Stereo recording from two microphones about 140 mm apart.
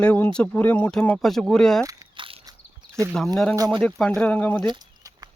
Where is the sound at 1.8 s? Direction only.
25° right (ahead or behind).